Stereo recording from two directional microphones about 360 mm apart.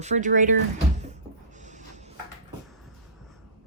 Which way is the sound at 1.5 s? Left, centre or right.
Centre.